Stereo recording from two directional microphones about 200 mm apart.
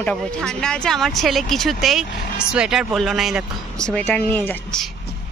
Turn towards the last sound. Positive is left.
turn(degrees=5)  # may be behind; listen again after turning